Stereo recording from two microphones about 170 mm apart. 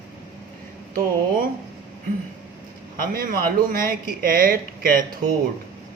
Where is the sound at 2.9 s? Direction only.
55° right (ahead or behind).